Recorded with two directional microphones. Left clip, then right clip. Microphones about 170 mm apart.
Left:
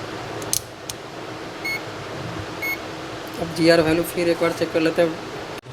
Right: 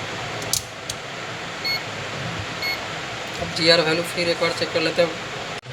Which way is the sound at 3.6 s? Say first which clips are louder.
Left 1 dB; 65° left (ahead or behind).